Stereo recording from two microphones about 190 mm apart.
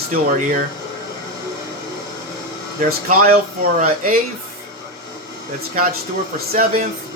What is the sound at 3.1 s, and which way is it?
Speech, 45° right (ahead or behind).